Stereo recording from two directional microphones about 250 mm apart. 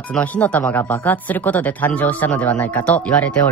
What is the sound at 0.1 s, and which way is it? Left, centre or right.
Speech, centre.